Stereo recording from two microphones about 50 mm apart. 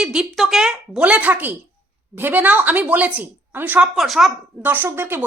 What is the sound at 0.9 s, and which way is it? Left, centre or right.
A woman's voice, right.